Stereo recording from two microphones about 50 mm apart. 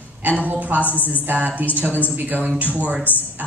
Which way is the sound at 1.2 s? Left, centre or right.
Right.